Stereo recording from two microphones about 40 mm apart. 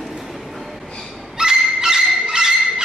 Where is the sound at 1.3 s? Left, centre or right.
Centre.